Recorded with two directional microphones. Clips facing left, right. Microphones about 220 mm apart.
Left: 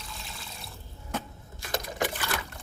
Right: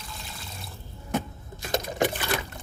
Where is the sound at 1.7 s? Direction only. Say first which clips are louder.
Right 5 dB; 25° right (ahead or behind).